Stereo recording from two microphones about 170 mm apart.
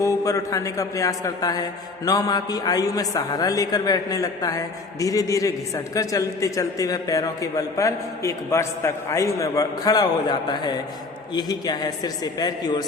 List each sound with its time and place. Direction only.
0.0 s a man's voice: 20° left (ahead or behind)